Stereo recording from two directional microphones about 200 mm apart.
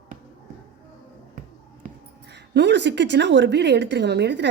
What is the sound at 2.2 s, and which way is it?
Speech, 60° right (ahead or behind).